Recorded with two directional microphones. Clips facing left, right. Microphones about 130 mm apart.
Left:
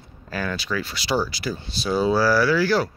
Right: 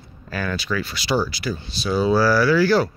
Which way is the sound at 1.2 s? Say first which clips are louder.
Right 2 dB; 40° left (ahead or behind).